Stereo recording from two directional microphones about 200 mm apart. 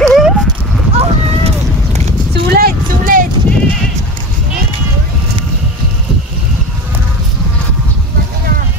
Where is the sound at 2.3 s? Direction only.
50° right (ahead or behind).